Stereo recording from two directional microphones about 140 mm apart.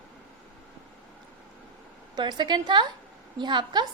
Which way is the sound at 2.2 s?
30° right (ahead or behind).